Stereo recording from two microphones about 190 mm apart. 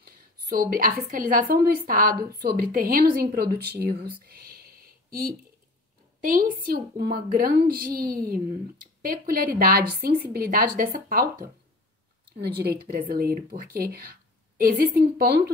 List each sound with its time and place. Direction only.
0.0 s a woman's voice: 50° right (ahead or behind)
12.4 s a woman's voice: 60° right (ahead or behind)